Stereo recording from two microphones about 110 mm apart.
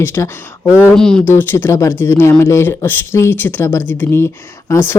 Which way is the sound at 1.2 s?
20° left (ahead or behind).